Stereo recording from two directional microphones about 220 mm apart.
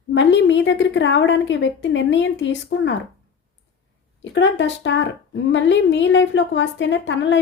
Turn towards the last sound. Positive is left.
turn(degrees=55)  # may be behind; listen again after turning